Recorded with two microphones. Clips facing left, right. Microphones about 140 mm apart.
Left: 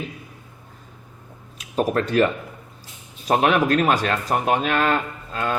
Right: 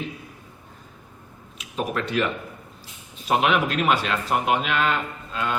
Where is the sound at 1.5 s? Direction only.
40° left (ahead or behind).